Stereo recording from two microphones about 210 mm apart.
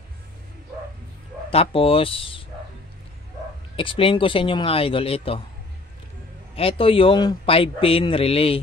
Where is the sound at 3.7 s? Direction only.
25° left (ahead or behind).